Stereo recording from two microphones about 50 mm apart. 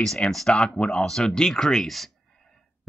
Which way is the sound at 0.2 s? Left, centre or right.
Left.